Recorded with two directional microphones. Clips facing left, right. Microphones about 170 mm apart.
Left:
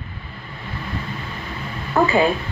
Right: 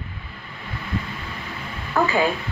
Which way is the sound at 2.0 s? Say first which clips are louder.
Left 3 dB; 35° left (ahead or behind).